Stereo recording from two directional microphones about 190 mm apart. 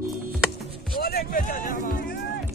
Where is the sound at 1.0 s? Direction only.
55° left (ahead or behind).